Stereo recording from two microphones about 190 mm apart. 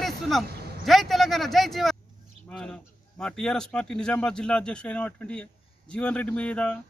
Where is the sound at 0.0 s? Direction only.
Centre (ahead or behind).